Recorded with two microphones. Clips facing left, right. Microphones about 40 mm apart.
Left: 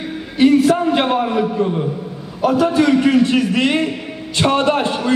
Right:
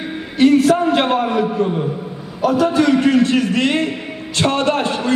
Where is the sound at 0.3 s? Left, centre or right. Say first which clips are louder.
Even; centre.